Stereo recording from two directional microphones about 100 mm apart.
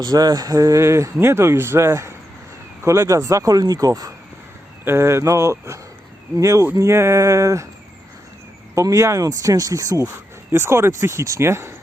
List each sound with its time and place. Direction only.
0.0 s speech: 40° right (ahead or behind)
8.7 s speech: 30° right (ahead or behind)
10.5 s speech: 25° right (ahead or behind)